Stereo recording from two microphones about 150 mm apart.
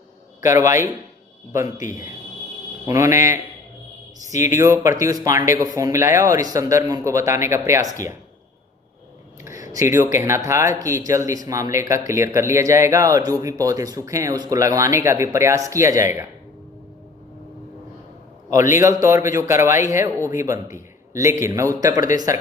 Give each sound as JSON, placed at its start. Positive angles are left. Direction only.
{"t": 0.4, "sound": "speech", "side_deg": -20}
{"t": 2.8, "sound": "speech", "side_deg": -20}
{"t": 4.4, "sound": "speech", "side_deg": -20}
{"t": 9.4, "sound": "speech", "side_deg": -20}
{"t": 18.7, "sound": "speech", "side_deg": -20}